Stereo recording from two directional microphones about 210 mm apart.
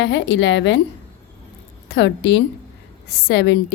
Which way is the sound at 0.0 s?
60° left (ahead or behind).